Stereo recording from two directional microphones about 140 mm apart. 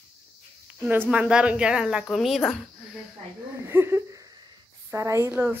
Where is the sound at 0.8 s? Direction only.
15° right (ahead or behind).